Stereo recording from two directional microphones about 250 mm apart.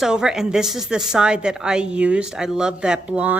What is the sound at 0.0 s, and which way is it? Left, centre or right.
A woman's voice, centre.